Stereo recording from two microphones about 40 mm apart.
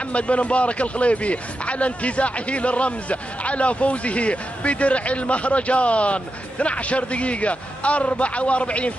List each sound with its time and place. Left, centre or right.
0.1 s a man's voice: left